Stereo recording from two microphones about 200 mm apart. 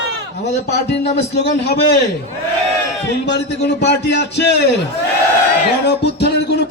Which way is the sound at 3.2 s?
60° left (ahead or behind).